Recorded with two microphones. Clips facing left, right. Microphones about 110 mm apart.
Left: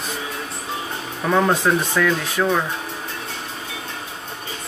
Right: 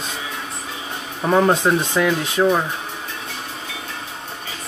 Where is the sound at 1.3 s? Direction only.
20° right (ahead or behind).